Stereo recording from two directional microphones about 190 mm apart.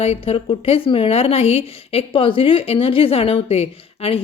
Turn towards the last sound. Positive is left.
turn(degrees=30)  # may be behind; listen again after turning